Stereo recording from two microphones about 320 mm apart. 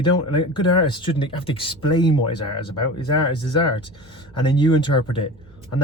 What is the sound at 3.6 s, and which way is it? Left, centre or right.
Speech, centre.